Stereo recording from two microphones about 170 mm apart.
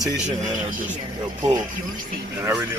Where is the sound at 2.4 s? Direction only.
15° right (ahead or behind).